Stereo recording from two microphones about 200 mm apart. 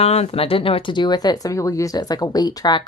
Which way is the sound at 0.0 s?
30° left (ahead or behind).